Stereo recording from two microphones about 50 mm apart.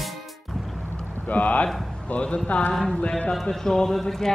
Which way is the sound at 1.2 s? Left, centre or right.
Left.